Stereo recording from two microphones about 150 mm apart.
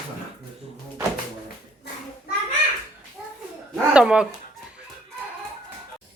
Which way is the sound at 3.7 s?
5° right (ahead or behind).